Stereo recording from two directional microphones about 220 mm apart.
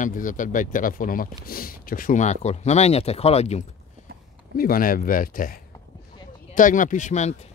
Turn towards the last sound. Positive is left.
turn(degrees=30)  # may be behind; listen again after turning